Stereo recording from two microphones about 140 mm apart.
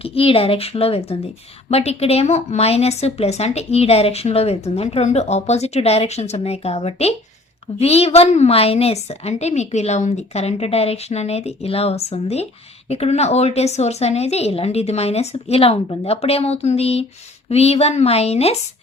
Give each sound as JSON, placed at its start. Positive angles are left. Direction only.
{"t": 0.0, "sound": "speech", "side_deg": 40}